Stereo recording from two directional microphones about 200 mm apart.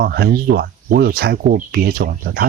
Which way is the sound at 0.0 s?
50° right (ahead or behind).